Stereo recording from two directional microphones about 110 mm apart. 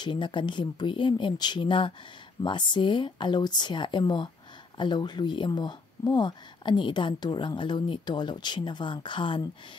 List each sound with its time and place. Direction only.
0.0 s speech: 45° left (ahead or behind)